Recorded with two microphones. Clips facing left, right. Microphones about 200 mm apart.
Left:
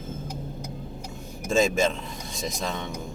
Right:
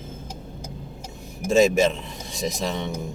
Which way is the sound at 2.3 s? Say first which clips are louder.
Right 4 dB; 20° right (ahead or behind).